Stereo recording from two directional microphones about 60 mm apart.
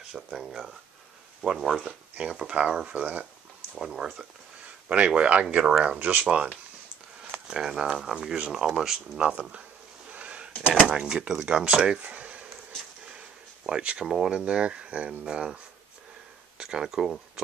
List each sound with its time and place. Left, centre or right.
0.1 s speech: centre
2.1 s speech: centre
2.9 s speech: right
3.7 s speech: centre
5.9 s speech: right; by 9.3 s centre
9.3 s a sound: right
11.0 s speech: centre
12.0 s a sound: centre
13.7 s speech: centre